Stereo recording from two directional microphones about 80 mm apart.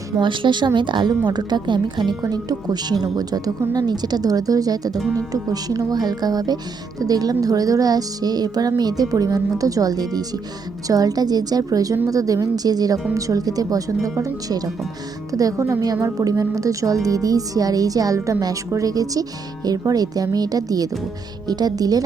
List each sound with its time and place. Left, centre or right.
0.2 s a woman's voice: right
2.3 s a woman's voice: right